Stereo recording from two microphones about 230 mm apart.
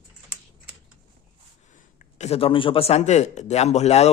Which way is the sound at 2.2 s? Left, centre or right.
Left.